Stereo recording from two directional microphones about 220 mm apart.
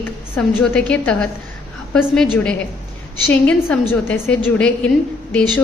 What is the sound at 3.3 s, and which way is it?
A woman's voice, 5° left (ahead or behind).